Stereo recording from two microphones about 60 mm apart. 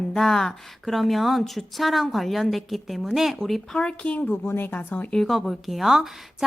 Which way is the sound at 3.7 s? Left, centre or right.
Centre.